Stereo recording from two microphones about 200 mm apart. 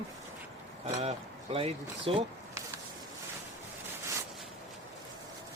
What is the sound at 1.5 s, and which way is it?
Speech, 30° right (ahead or behind).